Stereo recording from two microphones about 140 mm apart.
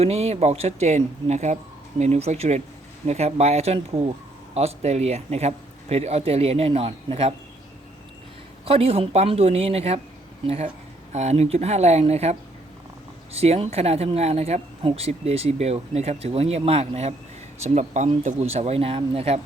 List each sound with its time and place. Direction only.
0.0 s speech: 50° right (ahead or behind)
8.6 s speech: 45° right (ahead or behind)